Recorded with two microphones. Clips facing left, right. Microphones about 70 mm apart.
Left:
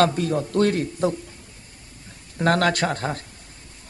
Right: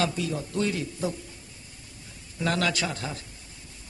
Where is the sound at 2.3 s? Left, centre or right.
Left.